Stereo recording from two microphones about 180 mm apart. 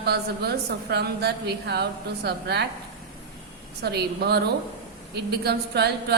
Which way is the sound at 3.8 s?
65° right (ahead or behind).